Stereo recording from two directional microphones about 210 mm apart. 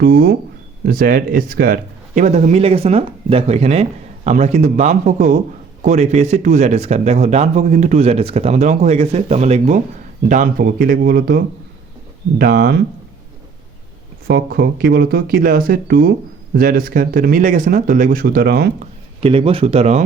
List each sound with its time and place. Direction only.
0.0 s speech: 45° right (ahead or behind)
14.3 s speech: 50° right (ahead or behind)
19.2 s speech: 25° right (ahead or behind)